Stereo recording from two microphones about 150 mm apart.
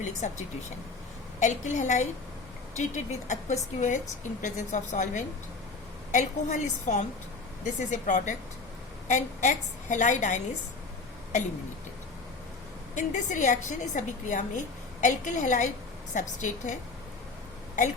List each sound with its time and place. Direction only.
0.2 s a woman's voice: 55° left (ahead or behind)
12.9 s a woman's voice: 55° left (ahead or behind)